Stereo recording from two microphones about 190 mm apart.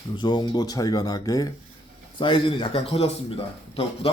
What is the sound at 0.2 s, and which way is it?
Speech, 25° left (ahead or behind).